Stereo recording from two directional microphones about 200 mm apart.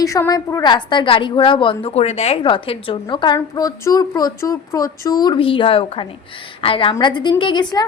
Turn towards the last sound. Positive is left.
turn(degrees=20)  # may be behind; listen again after turning